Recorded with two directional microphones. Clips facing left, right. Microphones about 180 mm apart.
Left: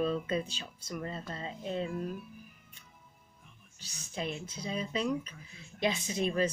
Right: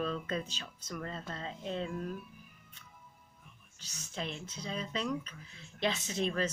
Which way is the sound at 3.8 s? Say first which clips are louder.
Left 2 dB; 10° left (ahead or behind).